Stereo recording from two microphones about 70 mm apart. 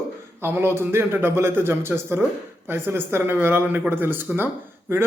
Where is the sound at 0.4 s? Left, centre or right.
Right.